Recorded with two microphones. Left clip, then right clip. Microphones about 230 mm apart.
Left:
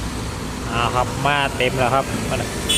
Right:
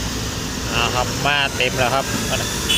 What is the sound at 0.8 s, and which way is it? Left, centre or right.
Speech, centre.